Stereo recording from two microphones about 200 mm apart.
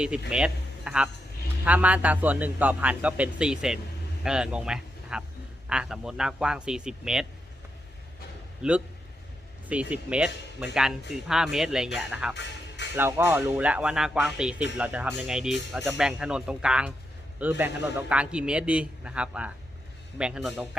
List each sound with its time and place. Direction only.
0.3 s a man's voice: 5° right (ahead or behind)
8.6 s a man's voice: 5° right (ahead or behind)
10.2 s speech: 60° left (ahead or behind)
11.1 s a man's voice: centre (ahead or behind)
12.3 s music: 60° left (ahead or behind)
13.0 s a man's voice: 10° right (ahead or behind)